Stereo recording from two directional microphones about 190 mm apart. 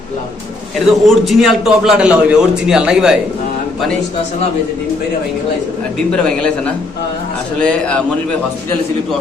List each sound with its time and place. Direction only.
0.9 s a man's voice: centre (ahead or behind)
6.1 s a man's voice: 5° left (ahead or behind)
7.6 s a man's voice: 5° left (ahead or behind)